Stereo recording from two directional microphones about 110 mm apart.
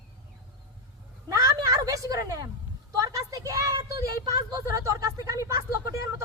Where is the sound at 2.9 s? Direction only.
30° right (ahead or behind).